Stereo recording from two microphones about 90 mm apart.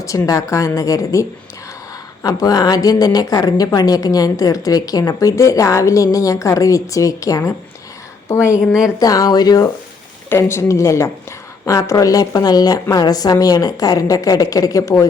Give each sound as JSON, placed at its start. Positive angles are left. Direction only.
{"t": 0.0, "sound": "a woman's voice", "side_deg": 35}
{"t": 8.5, "sound": "speech", "side_deg": -5}
{"t": 9.0, "sound": "a woman's voice", "side_deg": 45}
{"t": 10.2, "sound": "a woman's voice", "side_deg": 30}